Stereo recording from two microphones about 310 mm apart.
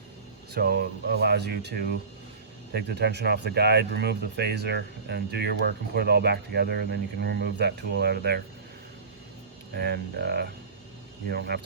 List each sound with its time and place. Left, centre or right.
0.5 s speech: right
9.7 s speech: right